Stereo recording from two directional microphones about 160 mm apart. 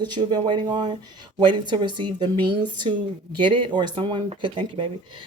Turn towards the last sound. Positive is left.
turn(degrees=-30)  # may be behind; listen again after turning